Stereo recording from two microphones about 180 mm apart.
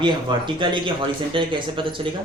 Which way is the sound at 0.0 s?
25° right (ahead or behind).